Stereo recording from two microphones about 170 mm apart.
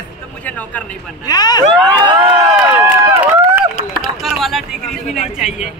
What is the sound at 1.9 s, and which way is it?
Crowd, 25° right (ahead or behind).